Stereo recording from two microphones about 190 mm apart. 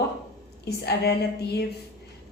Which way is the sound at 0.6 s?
55° left (ahead or behind).